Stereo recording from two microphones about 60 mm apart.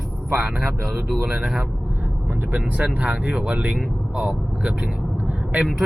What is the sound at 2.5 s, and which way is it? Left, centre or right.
Speech, right.